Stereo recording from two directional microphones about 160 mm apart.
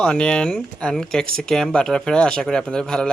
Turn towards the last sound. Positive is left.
turn(degrees=0)  # may be behind; listen again after turning